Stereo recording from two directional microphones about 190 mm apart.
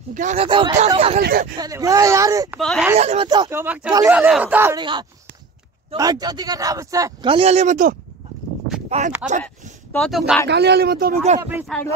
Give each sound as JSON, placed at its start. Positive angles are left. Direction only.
{"t": 0.1, "sound": "speech", "side_deg": -40}
{"t": 0.5, "sound": "speech", "side_deg": -25}
{"t": 1.2, "sound": "speech", "side_deg": -50}
{"t": 1.6, "sound": "speech", "side_deg": -20}
{"t": 2.5, "sound": "speech", "side_deg": 0}
{"t": 3.0, "sound": "speech", "side_deg": -35}
{"t": 3.3, "sound": "speech", "side_deg": -20}
{"t": 4.7, "sound": "speech", "side_deg": -25}
{"t": 7.3, "sound": "speech", "side_deg": -35}
{"t": 8.8, "sound": "a sound", "side_deg": -40}
{"t": 9.9, "sound": "speech", "side_deg": 0}
{"t": 10.5, "sound": "speech", "side_deg": -60}
{"t": 11.7, "sound": "speech", "side_deg": 5}